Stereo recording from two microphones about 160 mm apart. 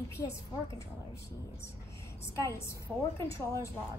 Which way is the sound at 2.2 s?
15° left (ahead or behind).